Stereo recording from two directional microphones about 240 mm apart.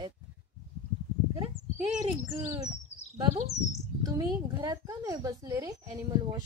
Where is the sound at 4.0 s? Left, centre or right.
Centre.